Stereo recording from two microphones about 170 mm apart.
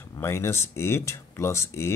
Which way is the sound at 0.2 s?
15° left (ahead or behind).